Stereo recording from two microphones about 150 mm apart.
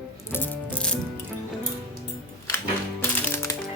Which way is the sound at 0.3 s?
10° left (ahead or behind).